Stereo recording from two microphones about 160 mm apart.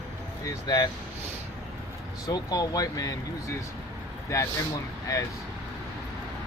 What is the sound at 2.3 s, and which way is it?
Speech, 25° left (ahead or behind).